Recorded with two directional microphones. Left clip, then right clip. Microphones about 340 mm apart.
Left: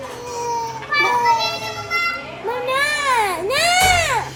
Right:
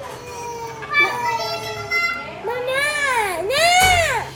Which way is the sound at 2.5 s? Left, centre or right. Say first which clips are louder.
Left 2 dB; centre.